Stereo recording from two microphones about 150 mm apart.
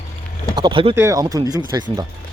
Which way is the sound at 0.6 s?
35° right (ahead or behind).